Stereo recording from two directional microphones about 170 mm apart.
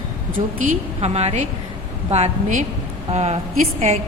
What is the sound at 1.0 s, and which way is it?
A woman's voice, 40° right (ahead or behind).